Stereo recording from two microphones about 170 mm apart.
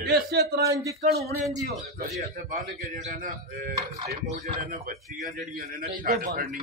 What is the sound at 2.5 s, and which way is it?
A man's voice, 50° right (ahead or behind).